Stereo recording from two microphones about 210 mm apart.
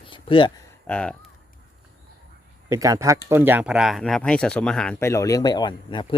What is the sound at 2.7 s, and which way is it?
Speech, 15° right (ahead or behind).